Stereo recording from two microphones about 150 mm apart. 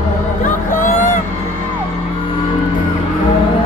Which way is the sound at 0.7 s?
55° left (ahead or behind).